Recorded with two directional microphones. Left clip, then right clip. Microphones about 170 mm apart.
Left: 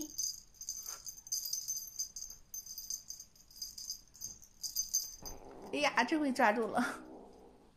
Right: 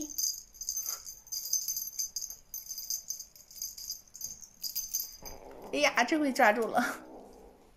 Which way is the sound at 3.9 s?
10° left (ahead or behind).